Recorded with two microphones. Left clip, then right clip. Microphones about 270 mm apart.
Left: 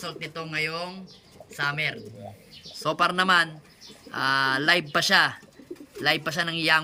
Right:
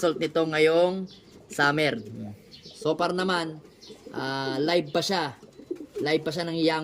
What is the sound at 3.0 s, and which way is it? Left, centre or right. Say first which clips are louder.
Speech: left 5 dB; centre.